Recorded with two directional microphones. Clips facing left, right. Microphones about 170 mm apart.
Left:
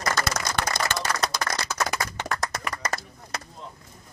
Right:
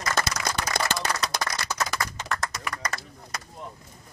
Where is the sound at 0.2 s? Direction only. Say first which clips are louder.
Left 2 dB; 55° left (ahead or behind).